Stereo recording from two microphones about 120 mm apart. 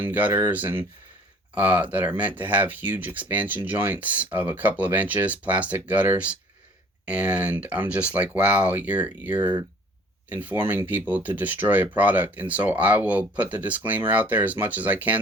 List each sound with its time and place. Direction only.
0.0 s speech: 15° right (ahead or behind)